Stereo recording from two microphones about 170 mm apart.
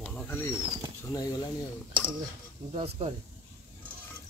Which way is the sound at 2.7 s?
35° right (ahead or behind).